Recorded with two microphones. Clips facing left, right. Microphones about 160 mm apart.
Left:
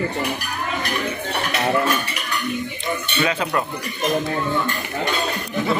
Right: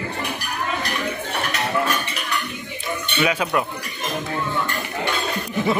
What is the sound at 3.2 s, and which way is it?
Speech, 10° right (ahead or behind).